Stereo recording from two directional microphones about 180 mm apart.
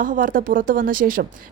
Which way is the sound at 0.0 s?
50° right (ahead or behind).